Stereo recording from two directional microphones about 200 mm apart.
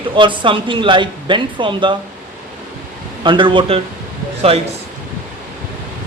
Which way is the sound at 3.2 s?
25° right (ahead or behind).